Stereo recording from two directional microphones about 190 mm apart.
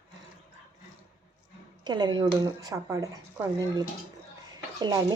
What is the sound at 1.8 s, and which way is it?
Speech, 20° right (ahead or behind).